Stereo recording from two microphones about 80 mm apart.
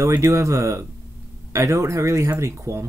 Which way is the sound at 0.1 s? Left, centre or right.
Right.